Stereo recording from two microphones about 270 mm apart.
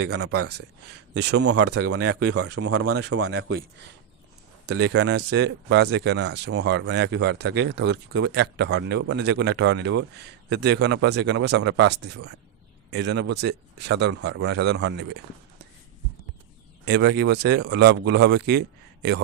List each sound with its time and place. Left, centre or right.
0.0 s speech: right
1.1 s speech: right
1.6 s speech: right
2.1 s speech: right
3.2 s speech: right
4.6 s speech: right
16.8 s speech: right